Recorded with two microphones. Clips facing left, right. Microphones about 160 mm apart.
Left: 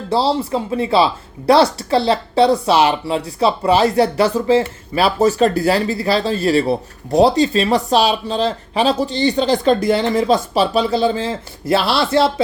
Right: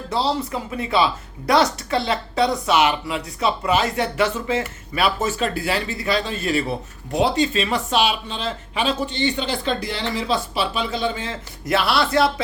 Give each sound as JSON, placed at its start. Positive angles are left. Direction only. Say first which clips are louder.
{"t": 0.1, "sound": "speech", "louder": "left 6 dB", "side_deg": 30}